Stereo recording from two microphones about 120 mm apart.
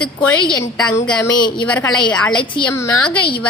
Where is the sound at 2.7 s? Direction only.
25° left (ahead or behind).